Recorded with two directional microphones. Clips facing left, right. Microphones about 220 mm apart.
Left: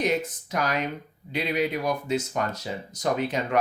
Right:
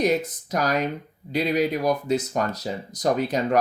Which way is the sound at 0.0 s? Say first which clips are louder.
Right 3 dB; 40° right (ahead or behind).